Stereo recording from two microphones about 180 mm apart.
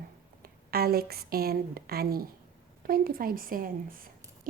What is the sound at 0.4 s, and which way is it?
A woman's voice, 60° right (ahead or behind).